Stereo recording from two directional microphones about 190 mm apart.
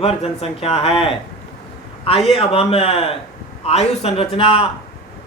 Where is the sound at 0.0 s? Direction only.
30° left (ahead or behind).